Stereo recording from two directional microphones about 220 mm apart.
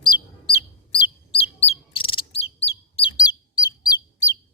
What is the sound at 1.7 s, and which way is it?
Chirp, 25° left (ahead or behind).